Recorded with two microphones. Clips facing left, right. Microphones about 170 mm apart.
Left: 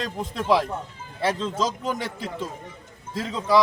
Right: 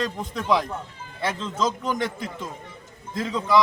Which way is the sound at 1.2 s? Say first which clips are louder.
Left 1 dB; 30° left (ahead or behind).